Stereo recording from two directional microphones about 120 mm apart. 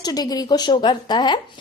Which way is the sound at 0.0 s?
35° left (ahead or behind).